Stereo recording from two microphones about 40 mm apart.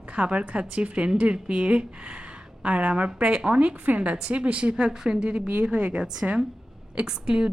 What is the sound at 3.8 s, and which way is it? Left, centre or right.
A woman's voice, right.